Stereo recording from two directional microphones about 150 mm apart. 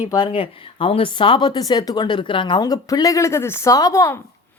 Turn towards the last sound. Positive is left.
turn(degrees=20)  # may be behind; listen again after turning